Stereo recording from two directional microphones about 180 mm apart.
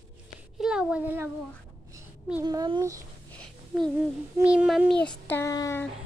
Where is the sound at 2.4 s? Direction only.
25° right (ahead or behind).